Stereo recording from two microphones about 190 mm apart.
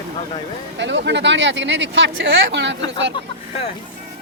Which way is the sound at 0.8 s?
70° right (ahead or behind).